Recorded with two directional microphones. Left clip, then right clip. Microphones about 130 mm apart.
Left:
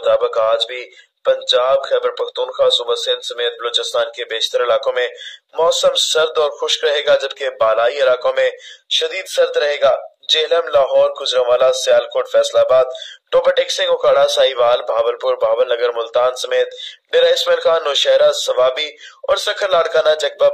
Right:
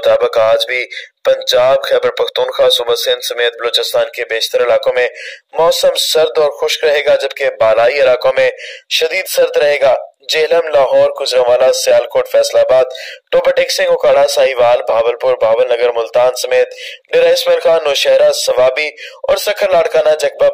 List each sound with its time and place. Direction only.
0.0 s speech: 40° right (ahead or behind)
3.9 s speech: 25° right (ahead or behind)